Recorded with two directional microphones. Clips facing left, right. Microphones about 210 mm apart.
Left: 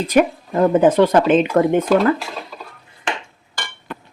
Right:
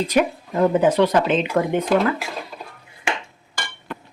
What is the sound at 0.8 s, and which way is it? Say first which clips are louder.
Speech: left 5 dB; 50° left (ahead or behind).